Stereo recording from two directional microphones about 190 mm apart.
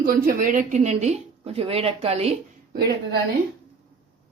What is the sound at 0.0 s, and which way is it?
Speech, 45° right (ahead or behind).